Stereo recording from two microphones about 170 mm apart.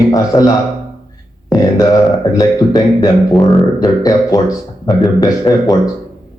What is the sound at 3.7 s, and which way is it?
A man's voice, 20° left (ahead or behind).